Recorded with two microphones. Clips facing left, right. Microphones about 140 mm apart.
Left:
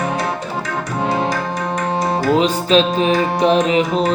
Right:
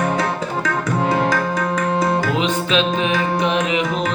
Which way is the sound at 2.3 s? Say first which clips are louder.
Left 5 dB; 35° left (ahead or behind).